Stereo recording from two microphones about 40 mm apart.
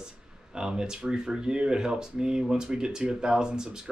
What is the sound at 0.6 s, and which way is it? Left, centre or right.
Speech, centre.